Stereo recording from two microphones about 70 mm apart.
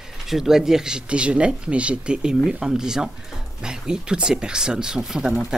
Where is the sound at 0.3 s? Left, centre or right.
Centre.